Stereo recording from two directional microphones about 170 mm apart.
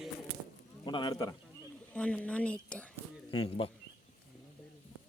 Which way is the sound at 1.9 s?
5° left (ahead or behind).